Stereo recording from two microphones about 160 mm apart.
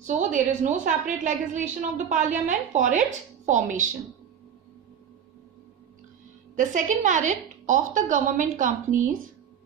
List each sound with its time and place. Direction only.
0.0 s a woman's voice: 50° right (ahead or behind)
6.5 s a woman's voice: 55° right (ahead or behind)